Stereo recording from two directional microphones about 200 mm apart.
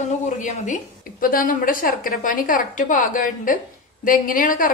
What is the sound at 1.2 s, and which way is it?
A woman's voice, 45° left (ahead or behind).